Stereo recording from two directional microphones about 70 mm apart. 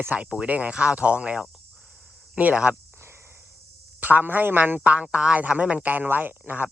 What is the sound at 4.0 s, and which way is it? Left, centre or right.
A man's voice, right.